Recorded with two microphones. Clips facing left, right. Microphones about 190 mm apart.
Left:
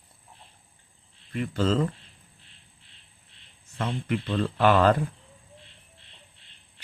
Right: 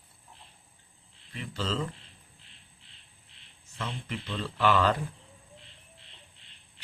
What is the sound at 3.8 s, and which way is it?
Speech, 55° left (ahead or behind).